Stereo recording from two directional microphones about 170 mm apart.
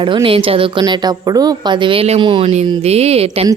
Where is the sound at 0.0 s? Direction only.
30° right (ahead or behind).